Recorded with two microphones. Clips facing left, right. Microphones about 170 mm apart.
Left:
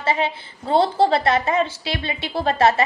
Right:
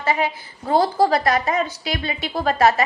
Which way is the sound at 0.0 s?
25° left (ahead or behind).